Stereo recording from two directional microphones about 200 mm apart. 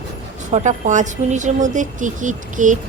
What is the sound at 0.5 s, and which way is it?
A woman's voice, 35° right (ahead or behind).